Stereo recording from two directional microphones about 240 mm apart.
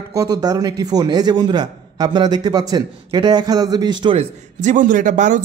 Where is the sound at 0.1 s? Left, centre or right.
Centre.